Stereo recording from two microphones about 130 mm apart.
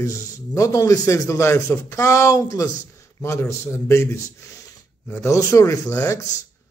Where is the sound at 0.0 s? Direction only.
25° left (ahead or behind).